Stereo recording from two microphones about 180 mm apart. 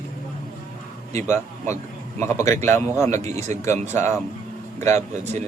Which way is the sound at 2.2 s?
15° left (ahead or behind).